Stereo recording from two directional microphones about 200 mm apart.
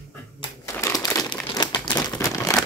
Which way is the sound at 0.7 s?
15° left (ahead or behind).